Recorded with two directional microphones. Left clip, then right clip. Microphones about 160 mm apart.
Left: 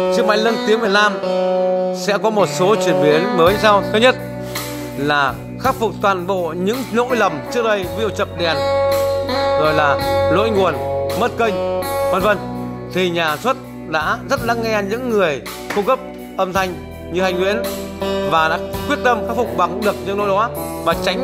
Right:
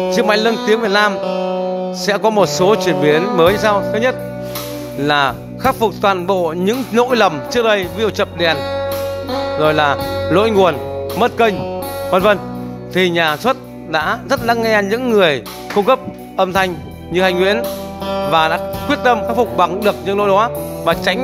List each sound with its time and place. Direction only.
0.1 s speech: 15° right (ahead or behind)
1.3 s music: 15° left (ahead or behind)
1.9 s speech: 10° right (ahead or behind)
3.9 s speech: 5° left (ahead or behind)
5.0 s speech: 15° right (ahead or behind)
9.6 s speech: 15° right (ahead or behind)